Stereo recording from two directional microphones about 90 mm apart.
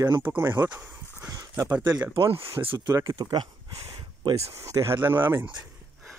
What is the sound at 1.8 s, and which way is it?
Speech, 45° right (ahead or behind).